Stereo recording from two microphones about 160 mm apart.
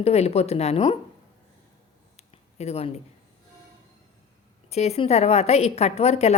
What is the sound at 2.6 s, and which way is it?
Speech, 40° left (ahead or behind).